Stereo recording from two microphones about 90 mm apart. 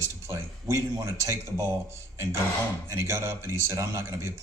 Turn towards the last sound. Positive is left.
turn(degrees=-35)  # may be behind; listen again after turning